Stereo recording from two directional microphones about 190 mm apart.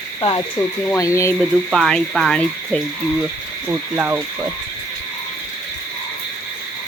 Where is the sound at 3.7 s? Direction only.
10° right (ahead or behind).